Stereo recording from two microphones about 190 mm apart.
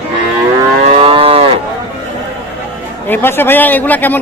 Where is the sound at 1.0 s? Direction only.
30° right (ahead or behind).